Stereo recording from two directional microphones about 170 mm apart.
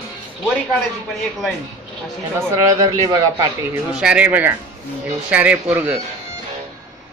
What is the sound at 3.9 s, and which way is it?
Speech, 5° right (ahead or behind).